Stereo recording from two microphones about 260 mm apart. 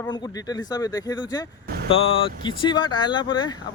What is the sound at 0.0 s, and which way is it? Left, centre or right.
Speech, centre.